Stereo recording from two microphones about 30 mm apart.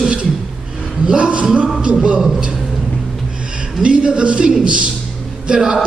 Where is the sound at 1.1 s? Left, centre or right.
Right.